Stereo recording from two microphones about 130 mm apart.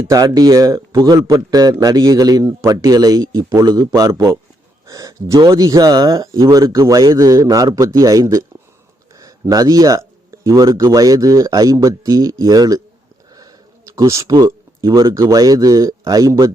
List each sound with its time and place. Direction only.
0.0 s a man's voice: 25° right (ahead or behind)